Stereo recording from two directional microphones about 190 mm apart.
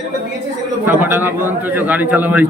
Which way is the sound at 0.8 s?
10° right (ahead or behind).